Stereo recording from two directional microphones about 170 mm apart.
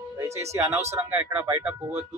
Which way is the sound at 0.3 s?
15° right (ahead or behind).